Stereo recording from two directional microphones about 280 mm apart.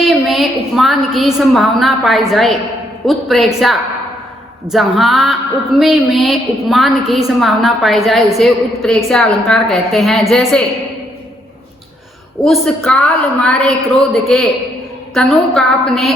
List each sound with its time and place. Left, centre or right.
0.0 s a woman's voice: centre
12.5 s a woman's voice: centre